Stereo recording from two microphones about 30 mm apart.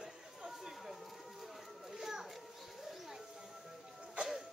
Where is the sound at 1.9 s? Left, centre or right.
Centre.